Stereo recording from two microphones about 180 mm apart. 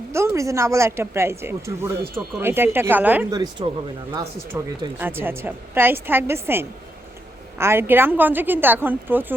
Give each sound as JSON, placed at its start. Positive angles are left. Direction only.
{"t": 0.1, "sound": "a woman's voice", "side_deg": -15}
{"t": 3.2, "sound": "a woman's voice", "side_deg": -20}